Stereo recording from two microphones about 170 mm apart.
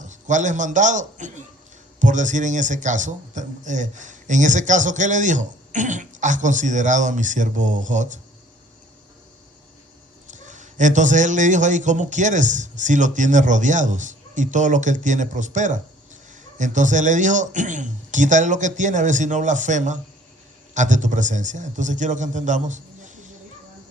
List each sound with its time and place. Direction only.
0.0 s a man's voice: 45° right (ahead or behind)
10.2 s a man's voice: 45° right (ahead or behind)